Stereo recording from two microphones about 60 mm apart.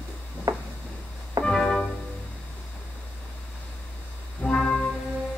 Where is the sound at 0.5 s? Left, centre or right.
Right.